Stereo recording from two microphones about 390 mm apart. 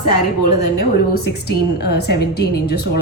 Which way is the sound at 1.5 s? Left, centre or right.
Left.